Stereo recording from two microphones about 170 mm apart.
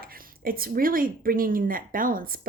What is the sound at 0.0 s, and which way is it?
Speech, 60° right (ahead or behind).